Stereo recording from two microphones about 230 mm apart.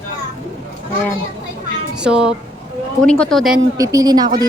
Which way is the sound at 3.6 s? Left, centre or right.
Centre.